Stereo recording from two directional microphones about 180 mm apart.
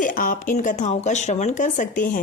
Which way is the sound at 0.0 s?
50° left (ahead or behind).